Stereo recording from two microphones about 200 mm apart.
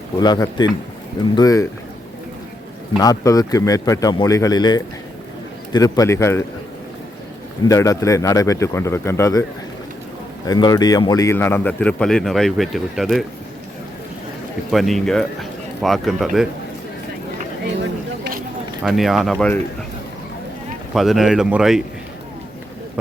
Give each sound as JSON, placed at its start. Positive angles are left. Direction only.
{"t": 0.2, "sound": "speech", "side_deg": 20}
{"t": 3.0, "sound": "speech", "side_deg": 20}
{"t": 7.7, "sound": "speech", "side_deg": 15}
{"t": 10.4, "sound": "speech", "side_deg": 20}
{"t": 14.7, "sound": "speech", "side_deg": 0}
{"t": 18.2, "sound": "a sound", "side_deg": -45}
{"t": 18.8, "sound": "speech", "side_deg": 0}
{"t": 20.9, "sound": "speech", "side_deg": 0}